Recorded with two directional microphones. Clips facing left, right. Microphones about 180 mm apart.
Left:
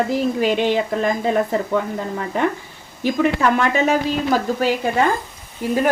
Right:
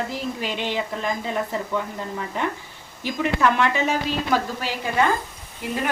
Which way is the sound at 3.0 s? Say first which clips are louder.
Left 4 dB; 45° left (ahead or behind).